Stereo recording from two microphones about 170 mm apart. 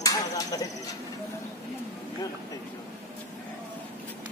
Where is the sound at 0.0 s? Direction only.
20° left (ahead or behind).